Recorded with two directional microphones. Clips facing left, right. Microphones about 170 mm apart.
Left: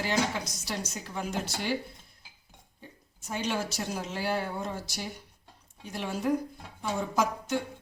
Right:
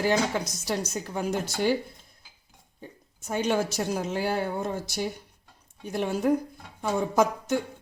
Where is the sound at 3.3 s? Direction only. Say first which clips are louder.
Right 6 dB; 50° right (ahead or behind).